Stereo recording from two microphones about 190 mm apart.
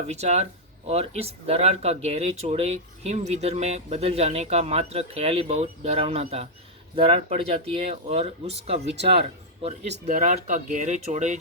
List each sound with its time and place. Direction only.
0.1 s speech: 35° right (ahead or behind)